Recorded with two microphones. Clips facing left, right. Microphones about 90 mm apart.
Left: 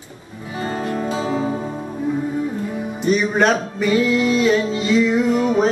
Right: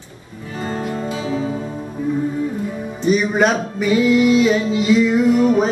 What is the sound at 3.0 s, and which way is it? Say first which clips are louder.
Music: right 1 dB; 5° right (ahead or behind).